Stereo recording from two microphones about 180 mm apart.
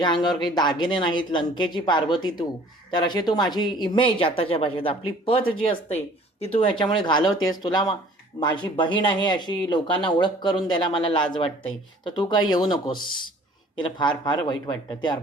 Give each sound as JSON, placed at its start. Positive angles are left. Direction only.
{"t": 0.0, "sound": "speech", "side_deg": 25}
{"t": 13.7, "sound": "speech", "side_deg": 25}